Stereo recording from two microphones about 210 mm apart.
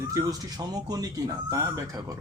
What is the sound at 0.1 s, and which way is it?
Speech, 15° right (ahead or behind).